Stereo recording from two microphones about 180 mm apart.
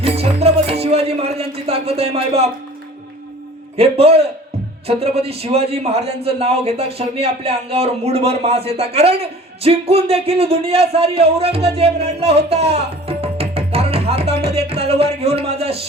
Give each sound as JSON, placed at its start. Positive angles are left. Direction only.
{"t": 0.0, "sound": "music", "side_deg": -35}
{"t": 3.8, "sound": "a man's voice", "side_deg": -35}
{"t": 12.5, "sound": "music", "side_deg": -35}